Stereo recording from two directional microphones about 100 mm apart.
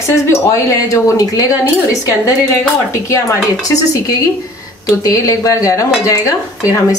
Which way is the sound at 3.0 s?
30° left (ahead or behind).